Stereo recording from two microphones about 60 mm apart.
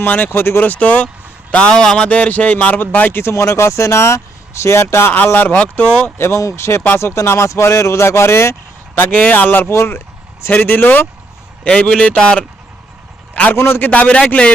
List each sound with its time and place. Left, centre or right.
0.0 s speech: left
0.6 s speech: left
1.7 s speech: centre
2.0 s speech: left
3.3 s speech: left
5.1 s speech: left
9.0 s speech: left
10.5 s speech: left
11.6 s a man's voice: centre
13.3 s a man's voice: left
13.6 s speech: left
13.9 s speech: left